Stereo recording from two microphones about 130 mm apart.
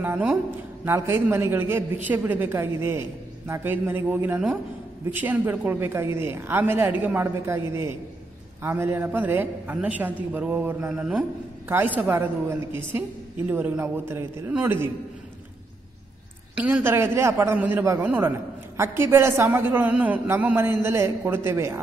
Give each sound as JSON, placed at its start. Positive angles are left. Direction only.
{"t": 0.0, "sound": "a woman's voice", "side_deg": -15}
{"t": 16.5, "sound": "a man's voice", "side_deg": -10}